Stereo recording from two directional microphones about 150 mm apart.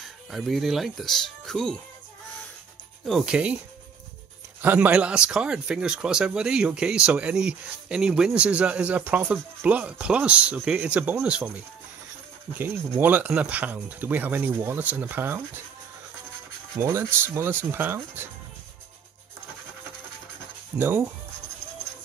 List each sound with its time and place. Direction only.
0.3 s speech: centre (ahead or behind)
3.1 s speech: 5° right (ahead or behind)
4.6 s speech: 10° right (ahead or behind)
12.5 s speech: 15° right (ahead or behind)
16.8 s speech: 15° right (ahead or behind)
20.7 s speech: 15° right (ahead or behind)